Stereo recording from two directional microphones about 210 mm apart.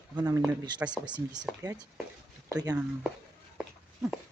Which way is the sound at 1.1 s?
20° right (ahead or behind).